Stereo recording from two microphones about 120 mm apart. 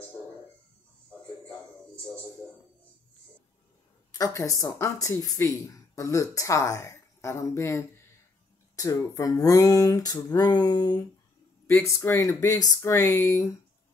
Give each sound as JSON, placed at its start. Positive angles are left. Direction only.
{"t": 4.1, "sound": "speech", "side_deg": 30}
{"t": 10.3, "sound": "a sound", "side_deg": 35}
{"t": 11.6, "sound": "speech", "side_deg": 25}